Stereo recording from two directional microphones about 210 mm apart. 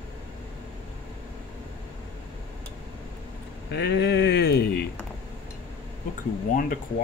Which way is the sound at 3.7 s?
50° left (ahead or behind).